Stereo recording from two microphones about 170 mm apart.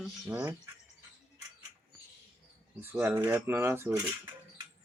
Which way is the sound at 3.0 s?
15° right (ahead or behind).